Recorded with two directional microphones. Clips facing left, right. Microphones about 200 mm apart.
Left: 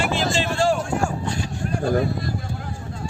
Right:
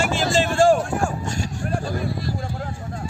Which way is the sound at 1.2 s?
45° right (ahead or behind).